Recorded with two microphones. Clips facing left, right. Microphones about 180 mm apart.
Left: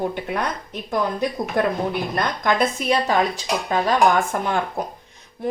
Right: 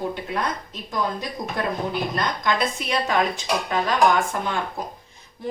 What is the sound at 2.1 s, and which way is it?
Speech, 50° left (ahead or behind).